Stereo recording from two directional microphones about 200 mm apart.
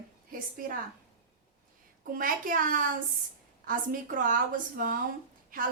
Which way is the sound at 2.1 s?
45° right (ahead or behind).